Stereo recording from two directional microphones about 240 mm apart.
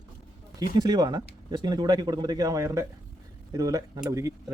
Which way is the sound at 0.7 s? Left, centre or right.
Centre.